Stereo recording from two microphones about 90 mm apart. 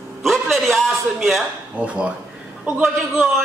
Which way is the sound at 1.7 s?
15° right (ahead or behind).